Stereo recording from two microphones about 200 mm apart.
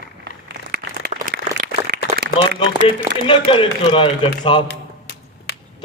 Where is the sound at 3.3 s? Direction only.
25° left (ahead or behind).